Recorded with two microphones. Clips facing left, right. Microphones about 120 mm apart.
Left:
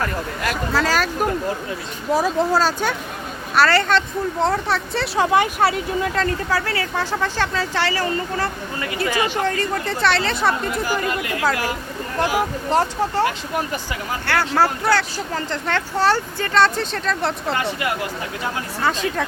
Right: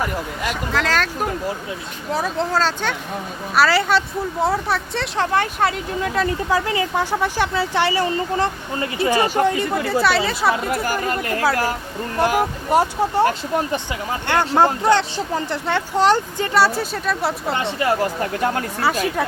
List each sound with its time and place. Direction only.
0.4 s speech: 5° left (ahead or behind)
3.5 s speech: 5° right (ahead or behind)
6.1 s speech: 15° right (ahead or behind)
9.1 s speech: 40° right (ahead or behind)
9.4 s speech: 15° right (ahead or behind)
10.8 s speech: 40° right (ahead or behind)
12.7 s speech: 15° right (ahead or behind)
13.7 s speech: 25° right (ahead or behind); by 17.3 s 5° right (ahead or behind)
17.5 s speech: 25° right (ahead or behind)
18.8 s speech: 10° right (ahead or behind)